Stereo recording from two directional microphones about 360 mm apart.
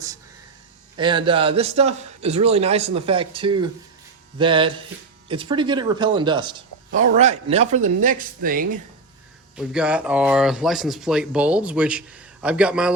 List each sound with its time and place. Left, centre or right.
0.9 s a man's voice: centre
9.6 s speech: centre